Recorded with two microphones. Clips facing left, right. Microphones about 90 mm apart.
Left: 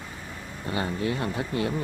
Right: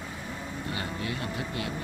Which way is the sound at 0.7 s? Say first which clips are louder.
Left 8 dB; 30° left (ahead or behind).